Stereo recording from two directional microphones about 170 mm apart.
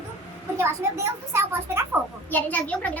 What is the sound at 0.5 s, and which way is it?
A woman's voice, 15° right (ahead or behind).